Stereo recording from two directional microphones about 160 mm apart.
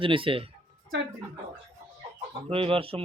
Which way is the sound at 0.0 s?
35° right (ahead or behind).